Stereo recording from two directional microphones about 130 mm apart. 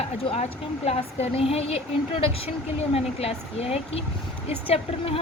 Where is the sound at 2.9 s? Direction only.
50° left (ahead or behind).